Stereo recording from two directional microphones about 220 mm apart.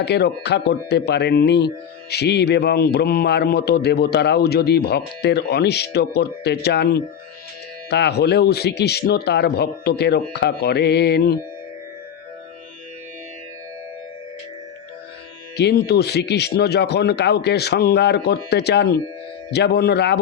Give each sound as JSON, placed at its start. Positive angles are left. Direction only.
{"t": 0.0, "sound": "speech", "side_deg": 50}
{"t": 15.5, "sound": "speech", "side_deg": 50}